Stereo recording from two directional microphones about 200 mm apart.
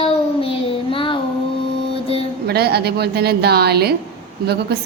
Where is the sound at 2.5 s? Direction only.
55° right (ahead or behind).